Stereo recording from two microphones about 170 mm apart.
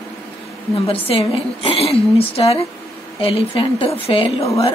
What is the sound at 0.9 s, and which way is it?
A woman's voice, 35° left (ahead or behind).